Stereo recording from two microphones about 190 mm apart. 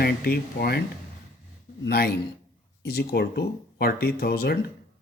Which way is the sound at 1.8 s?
55° left (ahead or behind).